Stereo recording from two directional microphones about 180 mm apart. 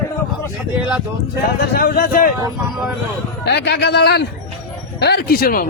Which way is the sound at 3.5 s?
70° left (ahead or behind).